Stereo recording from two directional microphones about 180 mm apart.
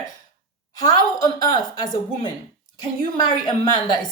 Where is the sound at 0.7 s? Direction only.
20° left (ahead or behind).